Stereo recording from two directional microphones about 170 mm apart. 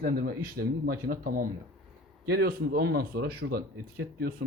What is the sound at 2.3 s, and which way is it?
Speech, 65° right (ahead or behind).